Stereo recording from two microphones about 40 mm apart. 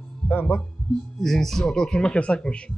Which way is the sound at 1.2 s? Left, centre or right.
Centre.